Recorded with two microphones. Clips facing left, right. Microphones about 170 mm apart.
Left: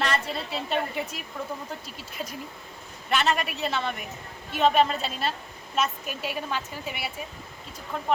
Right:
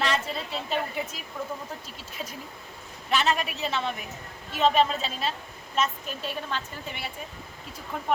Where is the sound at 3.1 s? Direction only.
Centre (ahead or behind).